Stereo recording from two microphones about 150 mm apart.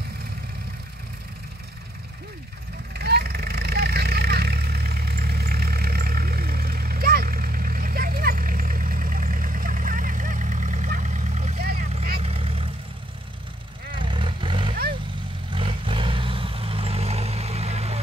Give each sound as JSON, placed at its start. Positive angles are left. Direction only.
{"t": 2.9, "sound": "vehicle", "side_deg": -90}
{"t": 13.9, "sound": "vehicle", "side_deg": -35}
{"t": 14.7, "sound": "vehicle", "side_deg": -90}
{"t": 15.5, "sound": "vehicle", "side_deg": -35}